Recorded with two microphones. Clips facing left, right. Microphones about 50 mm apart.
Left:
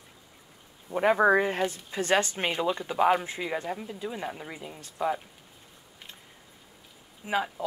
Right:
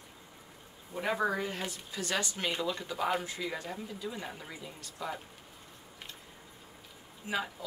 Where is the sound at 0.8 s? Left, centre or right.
Left.